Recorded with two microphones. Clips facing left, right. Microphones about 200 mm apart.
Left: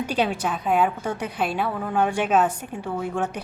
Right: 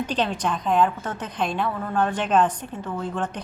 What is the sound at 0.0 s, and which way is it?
A woman's voice, 10° left (ahead or behind).